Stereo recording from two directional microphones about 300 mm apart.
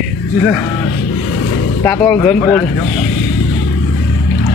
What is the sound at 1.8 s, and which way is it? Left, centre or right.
Speech, centre.